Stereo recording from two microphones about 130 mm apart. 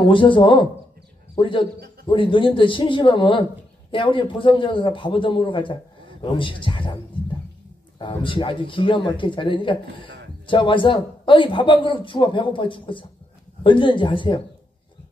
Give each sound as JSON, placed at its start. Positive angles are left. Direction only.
{"t": 0.0, "sound": "speech", "side_deg": 40}
{"t": 8.0, "sound": "speech", "side_deg": 40}